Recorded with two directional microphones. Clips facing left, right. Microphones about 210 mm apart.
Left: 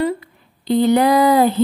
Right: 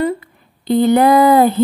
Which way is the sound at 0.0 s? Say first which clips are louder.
Right 2 dB; 50° right (ahead or behind).